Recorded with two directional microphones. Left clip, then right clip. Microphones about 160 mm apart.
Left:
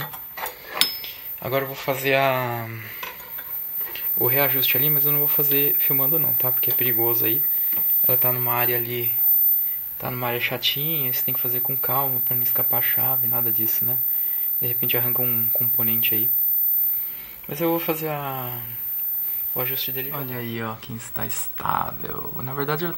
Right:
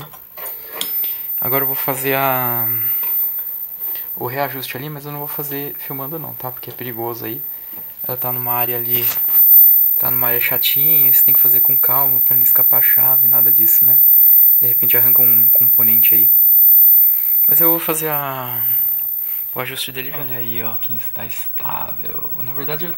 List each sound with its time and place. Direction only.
1.0 s a sound: 30° right (ahead or behind)
2.0 s speech: 30° right (ahead or behind)
3.9 s speech: 10° right (ahead or behind)
17.5 s speech: 10° right (ahead or behind)
21.6 s speech: 15° left (ahead or behind)